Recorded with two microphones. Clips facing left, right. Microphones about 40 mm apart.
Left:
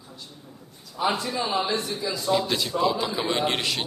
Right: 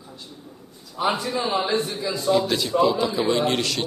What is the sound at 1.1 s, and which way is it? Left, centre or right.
Speech, centre.